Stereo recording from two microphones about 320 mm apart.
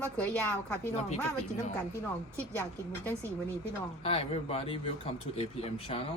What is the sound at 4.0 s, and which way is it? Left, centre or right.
Speech, centre.